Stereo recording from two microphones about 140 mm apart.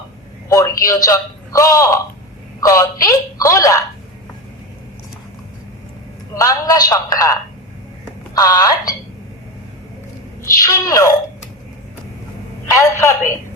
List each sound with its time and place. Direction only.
0.4 s a sound: 25° left (ahead or behind)
0.9 s speech: 25° left (ahead or behind)
6.3 s speech: 25° left (ahead or behind)
8.4 s speech: 25° left (ahead or behind)
10.6 s speech: 25° left (ahead or behind)
12.7 s speech: 20° left (ahead or behind)